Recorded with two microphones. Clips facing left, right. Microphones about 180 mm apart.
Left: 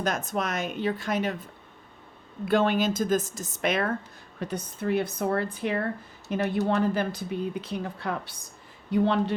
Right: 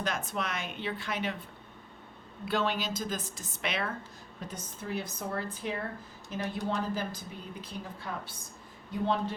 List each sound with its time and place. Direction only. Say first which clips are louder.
0.0 s a woman's voice: left 5 dB; 45° left (ahead or behind)
2.5 s a woman's voice: left 8 dB; 50° left (ahead or behind)
4.4 s a woman's voice: left 10 dB; 65° left (ahead or behind)